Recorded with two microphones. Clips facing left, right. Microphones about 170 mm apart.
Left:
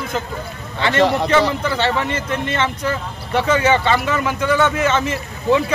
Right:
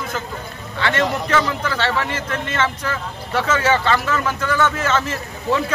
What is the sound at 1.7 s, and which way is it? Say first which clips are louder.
Speech: left 3 dB; 15° left (ahead or behind).